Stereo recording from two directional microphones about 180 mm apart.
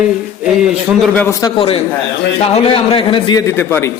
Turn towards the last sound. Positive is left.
turn(degrees=30)  # may be behind; listen again after turning